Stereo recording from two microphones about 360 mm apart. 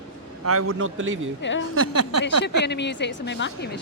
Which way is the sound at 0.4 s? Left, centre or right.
Right.